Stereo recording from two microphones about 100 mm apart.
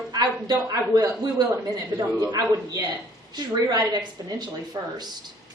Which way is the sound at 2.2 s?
40° right (ahead or behind).